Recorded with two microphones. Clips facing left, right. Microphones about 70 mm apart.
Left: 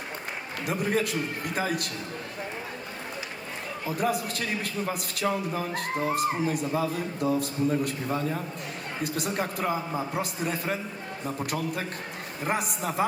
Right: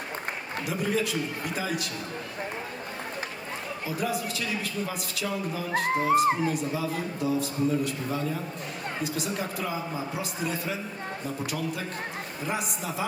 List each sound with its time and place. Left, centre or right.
0.6 s a man's voice: left
3.8 s a man's voice: left
5.7 s music: right
6.5 s a man's voice: left